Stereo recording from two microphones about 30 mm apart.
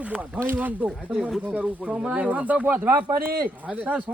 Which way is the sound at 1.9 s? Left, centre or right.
Right.